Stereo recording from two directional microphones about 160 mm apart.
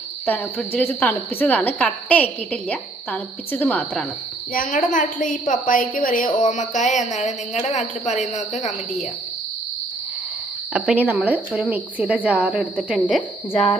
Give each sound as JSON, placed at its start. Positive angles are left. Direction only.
{"t": 0.3, "sound": "a woman's voice", "side_deg": 10}
{"t": 4.5, "sound": "a woman's voice", "side_deg": 55}
{"t": 10.7, "sound": "a woman's voice", "side_deg": -5}
{"t": 13.5, "sound": "speech", "side_deg": 35}